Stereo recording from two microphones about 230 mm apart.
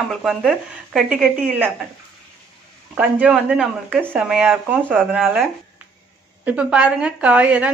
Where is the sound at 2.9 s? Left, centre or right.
Centre.